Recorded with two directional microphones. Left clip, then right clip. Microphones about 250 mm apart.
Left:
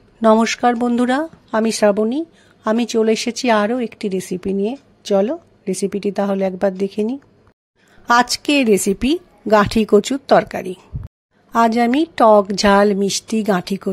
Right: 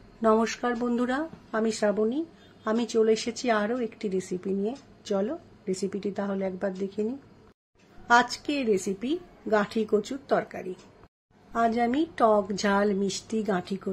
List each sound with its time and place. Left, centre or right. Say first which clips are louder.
0.2 s speech: left 10 dB; left